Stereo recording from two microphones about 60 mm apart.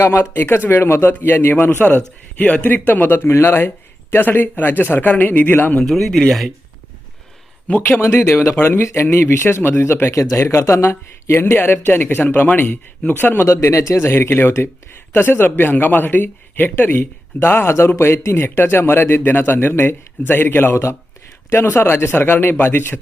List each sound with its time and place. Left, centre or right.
0.2 s speech: left
2.4 s speech: left
5.9 s speech: centre
7.8 s speech: left
10.2 s speech: left
13.5 s speech: left
14.1 s speech: left